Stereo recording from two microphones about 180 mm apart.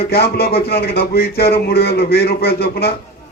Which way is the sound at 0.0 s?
60° left (ahead or behind).